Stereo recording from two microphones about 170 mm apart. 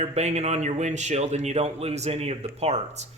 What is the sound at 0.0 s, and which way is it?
A man's voice, 40° right (ahead or behind).